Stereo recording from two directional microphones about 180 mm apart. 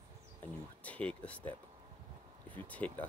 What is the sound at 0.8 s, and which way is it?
Speech, 5° left (ahead or behind).